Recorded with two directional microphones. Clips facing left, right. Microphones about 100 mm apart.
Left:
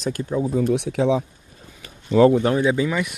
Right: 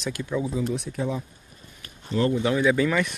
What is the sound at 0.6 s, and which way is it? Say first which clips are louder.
Speech: left 7 dB; 75° left (ahead or behind).